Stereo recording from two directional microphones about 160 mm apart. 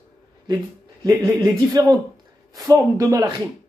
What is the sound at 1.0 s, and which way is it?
A man's voice, 20° right (ahead or behind).